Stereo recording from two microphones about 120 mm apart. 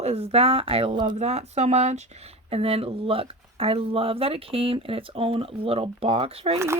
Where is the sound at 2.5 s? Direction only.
55° right (ahead or behind).